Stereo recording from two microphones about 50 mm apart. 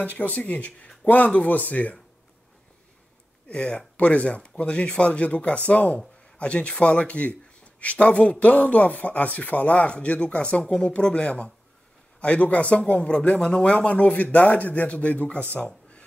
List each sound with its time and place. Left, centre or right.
0.0 s speech: left
3.4 s speech: left
15.5 s a sound: left